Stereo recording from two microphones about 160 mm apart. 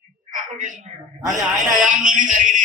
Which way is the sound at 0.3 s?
55° right (ahead or behind).